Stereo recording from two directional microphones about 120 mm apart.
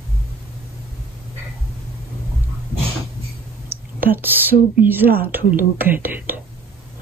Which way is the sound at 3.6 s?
15° right (ahead or behind).